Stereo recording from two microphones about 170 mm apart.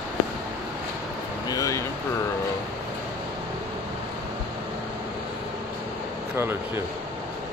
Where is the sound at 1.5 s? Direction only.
20° left (ahead or behind).